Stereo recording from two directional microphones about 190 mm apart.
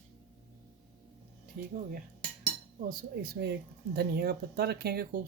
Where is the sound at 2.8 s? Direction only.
50° right (ahead or behind).